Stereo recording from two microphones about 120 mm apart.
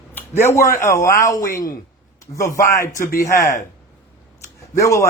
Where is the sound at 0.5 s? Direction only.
25° left (ahead or behind).